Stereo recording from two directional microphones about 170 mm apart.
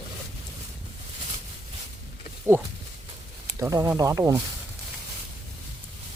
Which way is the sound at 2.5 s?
10° right (ahead or behind).